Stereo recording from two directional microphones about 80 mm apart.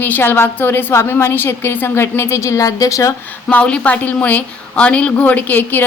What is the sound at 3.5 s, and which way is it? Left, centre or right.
A woman's voice, centre.